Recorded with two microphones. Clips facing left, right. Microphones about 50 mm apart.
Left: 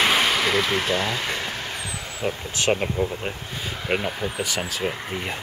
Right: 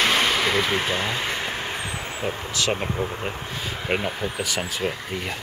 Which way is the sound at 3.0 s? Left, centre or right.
Right.